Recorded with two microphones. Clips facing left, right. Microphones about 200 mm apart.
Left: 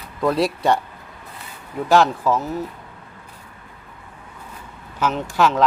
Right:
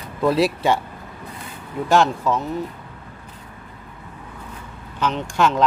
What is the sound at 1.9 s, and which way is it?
Speech, centre (ahead or behind).